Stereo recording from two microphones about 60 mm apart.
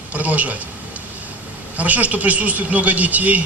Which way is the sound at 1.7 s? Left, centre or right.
Right.